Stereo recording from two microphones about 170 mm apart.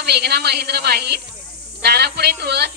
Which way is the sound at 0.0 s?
75° right (ahead or behind).